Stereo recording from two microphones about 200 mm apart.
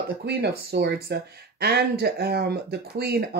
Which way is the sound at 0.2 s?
55° right (ahead or behind).